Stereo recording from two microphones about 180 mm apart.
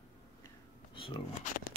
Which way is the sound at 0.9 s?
30° left (ahead or behind).